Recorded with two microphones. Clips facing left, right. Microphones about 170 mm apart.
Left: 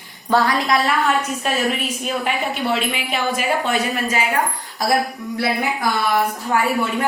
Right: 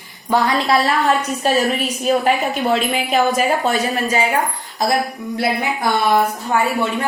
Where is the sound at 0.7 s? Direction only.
35° right (ahead or behind).